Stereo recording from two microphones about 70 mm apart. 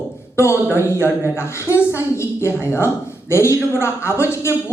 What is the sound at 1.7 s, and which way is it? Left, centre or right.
Speech, left.